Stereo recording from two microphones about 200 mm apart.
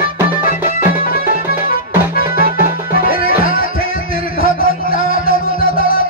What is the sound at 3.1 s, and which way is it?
Music, 45° left (ahead or behind).